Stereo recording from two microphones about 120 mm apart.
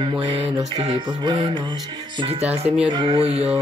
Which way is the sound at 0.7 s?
60° right (ahead or behind).